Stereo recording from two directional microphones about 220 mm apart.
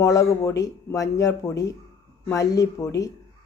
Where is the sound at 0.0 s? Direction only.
15° left (ahead or behind).